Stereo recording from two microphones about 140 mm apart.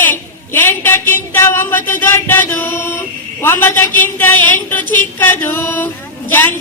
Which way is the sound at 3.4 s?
15° left (ahead or behind).